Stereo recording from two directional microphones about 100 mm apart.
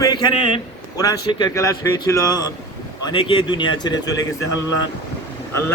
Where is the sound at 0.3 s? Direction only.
65° left (ahead or behind).